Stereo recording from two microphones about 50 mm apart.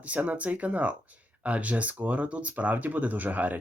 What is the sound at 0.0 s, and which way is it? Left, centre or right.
Speech, right.